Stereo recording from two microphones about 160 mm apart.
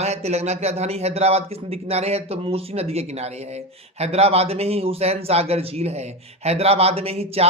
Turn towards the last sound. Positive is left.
turn(degrees=-40)  # may be behind; listen again after turning